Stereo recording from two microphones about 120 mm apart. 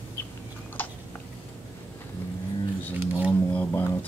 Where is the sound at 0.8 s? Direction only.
15° left (ahead or behind).